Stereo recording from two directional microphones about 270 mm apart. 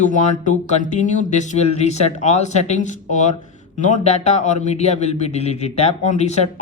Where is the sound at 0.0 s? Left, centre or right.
Left.